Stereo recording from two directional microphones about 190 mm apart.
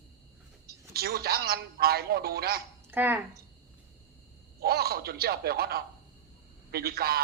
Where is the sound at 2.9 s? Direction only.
10° right (ahead or behind).